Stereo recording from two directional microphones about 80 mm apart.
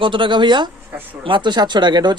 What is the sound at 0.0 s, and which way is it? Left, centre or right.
Speech, right.